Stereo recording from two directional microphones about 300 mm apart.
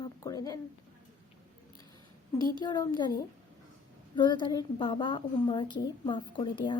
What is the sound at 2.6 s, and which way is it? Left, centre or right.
Speech, centre.